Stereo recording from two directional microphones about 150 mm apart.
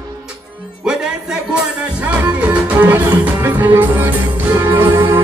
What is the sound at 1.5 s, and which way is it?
Music, 10° right (ahead or behind).